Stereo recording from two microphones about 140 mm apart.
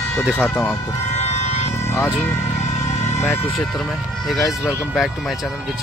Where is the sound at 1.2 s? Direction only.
50° left (ahead or behind).